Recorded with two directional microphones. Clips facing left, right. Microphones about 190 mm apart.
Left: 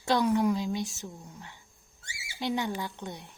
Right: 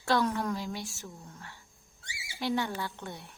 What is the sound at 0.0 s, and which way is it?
Speech, 15° left (ahead or behind).